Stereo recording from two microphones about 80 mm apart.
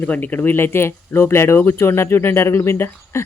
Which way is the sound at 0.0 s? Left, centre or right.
Left.